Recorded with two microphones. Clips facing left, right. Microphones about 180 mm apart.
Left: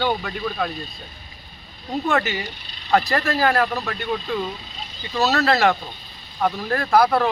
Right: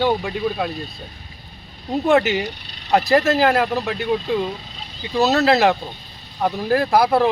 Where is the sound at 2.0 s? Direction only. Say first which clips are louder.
Right 7 dB; 25° right (ahead or behind).